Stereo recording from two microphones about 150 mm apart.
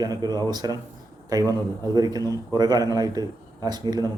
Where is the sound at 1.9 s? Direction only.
25° right (ahead or behind).